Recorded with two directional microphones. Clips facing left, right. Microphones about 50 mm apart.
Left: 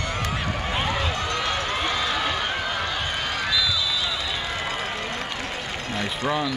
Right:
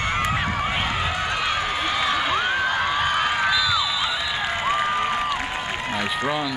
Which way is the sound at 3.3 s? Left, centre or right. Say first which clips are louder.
Right 4 dB; right.